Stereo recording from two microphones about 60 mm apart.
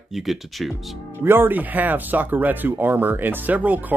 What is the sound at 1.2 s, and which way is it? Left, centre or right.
Speech, right.